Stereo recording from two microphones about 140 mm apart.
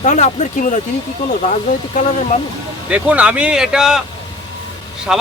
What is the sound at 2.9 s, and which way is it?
Speech, 10° right (ahead or behind).